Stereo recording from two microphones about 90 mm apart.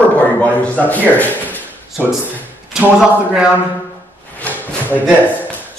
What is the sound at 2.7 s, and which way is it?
Speech, 5° right (ahead or behind).